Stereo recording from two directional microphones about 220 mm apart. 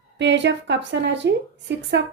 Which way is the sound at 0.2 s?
55° right (ahead or behind).